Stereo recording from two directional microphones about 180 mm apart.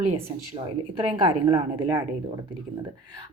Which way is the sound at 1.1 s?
25° right (ahead or behind).